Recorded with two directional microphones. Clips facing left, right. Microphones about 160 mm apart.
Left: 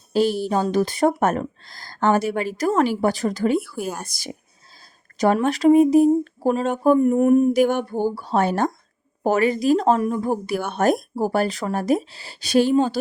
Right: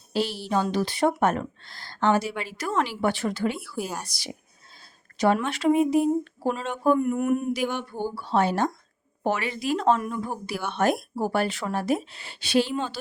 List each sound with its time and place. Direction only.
0.1 s speech: 45° left (ahead or behind)
7.5 s speech: 50° left (ahead or behind)